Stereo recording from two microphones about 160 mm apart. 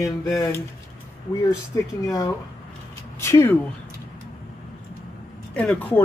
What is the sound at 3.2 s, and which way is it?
Speech, 15° left (ahead or behind).